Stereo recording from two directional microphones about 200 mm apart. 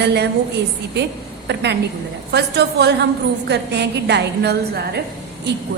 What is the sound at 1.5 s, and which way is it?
A woman's voice, 60° right (ahead or behind).